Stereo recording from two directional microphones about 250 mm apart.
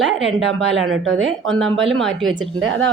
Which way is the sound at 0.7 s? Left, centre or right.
Right.